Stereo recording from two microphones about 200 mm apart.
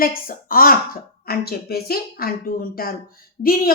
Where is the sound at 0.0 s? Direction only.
45° left (ahead or behind).